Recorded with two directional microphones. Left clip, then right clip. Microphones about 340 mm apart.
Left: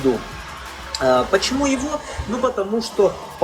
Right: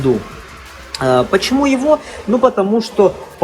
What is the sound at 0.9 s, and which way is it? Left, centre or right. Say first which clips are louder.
Speech: right 3 dB; centre.